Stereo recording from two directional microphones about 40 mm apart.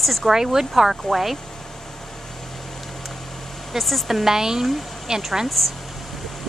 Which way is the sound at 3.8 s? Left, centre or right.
Centre.